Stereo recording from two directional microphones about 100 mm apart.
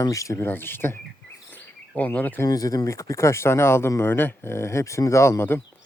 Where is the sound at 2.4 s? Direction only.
35° left (ahead or behind).